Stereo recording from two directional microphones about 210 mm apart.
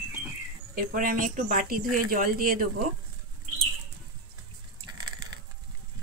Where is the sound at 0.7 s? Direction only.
40° right (ahead or behind).